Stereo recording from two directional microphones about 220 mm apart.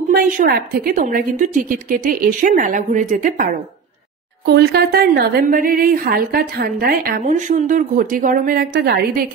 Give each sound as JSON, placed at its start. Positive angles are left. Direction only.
{"t": 0.1, "sound": "a woman's voice", "side_deg": -40}
{"t": 4.5, "sound": "a woman's voice", "side_deg": -45}